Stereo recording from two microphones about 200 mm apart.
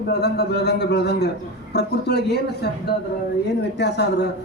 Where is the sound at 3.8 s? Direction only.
55° left (ahead or behind).